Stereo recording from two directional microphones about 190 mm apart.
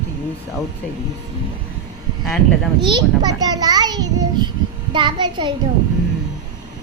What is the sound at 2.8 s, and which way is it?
A child's voice, 25° right (ahead or behind).